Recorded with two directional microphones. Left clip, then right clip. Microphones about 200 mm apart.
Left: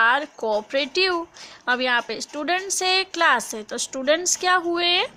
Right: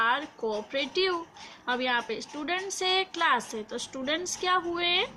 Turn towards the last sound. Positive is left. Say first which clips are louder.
# left 6 dB
turn(degrees=55)  # may be behind; listen again after turning